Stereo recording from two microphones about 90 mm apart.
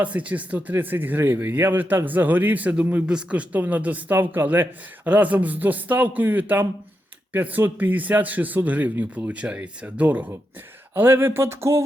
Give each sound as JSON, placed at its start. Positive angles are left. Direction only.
{"t": 0.0, "sound": "speech", "side_deg": -15}